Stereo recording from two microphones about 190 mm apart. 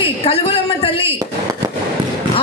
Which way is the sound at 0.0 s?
30° left (ahead or behind).